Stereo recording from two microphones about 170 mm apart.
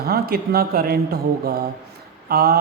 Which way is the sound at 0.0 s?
65° right (ahead or behind).